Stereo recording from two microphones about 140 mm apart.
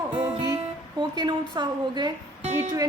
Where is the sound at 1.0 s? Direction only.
30° right (ahead or behind).